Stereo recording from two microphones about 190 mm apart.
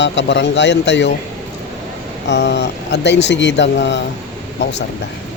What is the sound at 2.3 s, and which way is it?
Speech, 65° left (ahead or behind).